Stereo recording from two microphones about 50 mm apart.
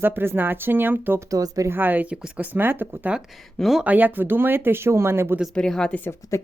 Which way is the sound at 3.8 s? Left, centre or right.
Right.